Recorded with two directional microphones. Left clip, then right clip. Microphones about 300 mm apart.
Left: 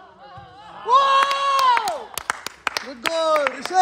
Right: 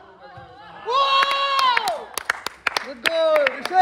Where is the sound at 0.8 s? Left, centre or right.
Left.